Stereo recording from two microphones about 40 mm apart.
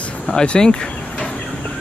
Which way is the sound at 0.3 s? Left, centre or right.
Centre.